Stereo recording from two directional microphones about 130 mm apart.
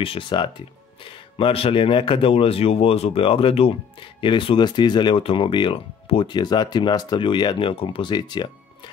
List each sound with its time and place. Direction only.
0.0 s speech: 40° left (ahead or behind)